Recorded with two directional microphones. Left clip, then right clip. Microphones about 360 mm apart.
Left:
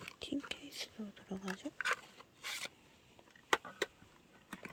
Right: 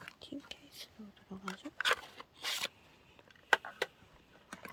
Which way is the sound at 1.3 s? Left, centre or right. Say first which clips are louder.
Left 4 dB; centre.